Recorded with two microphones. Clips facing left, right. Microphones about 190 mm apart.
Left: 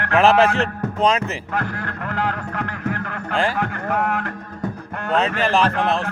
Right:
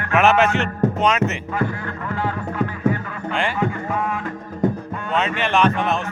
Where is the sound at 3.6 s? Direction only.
70° left (ahead or behind).